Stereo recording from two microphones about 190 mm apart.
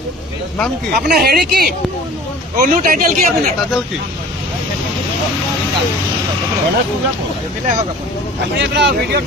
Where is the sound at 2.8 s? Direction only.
45° right (ahead or behind).